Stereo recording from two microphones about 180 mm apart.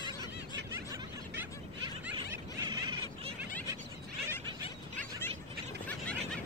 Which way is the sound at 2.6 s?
25° right (ahead or behind).